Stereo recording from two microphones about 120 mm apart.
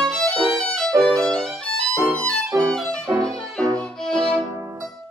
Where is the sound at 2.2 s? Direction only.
5° left (ahead or behind).